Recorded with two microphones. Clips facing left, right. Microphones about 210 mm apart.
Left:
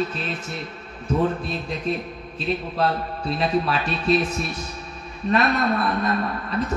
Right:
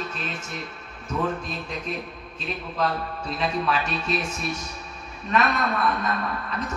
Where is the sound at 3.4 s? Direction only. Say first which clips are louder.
Left 2 dB; 35° left (ahead or behind).